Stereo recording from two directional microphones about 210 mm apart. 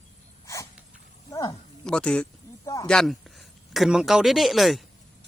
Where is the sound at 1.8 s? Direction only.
5° left (ahead or behind).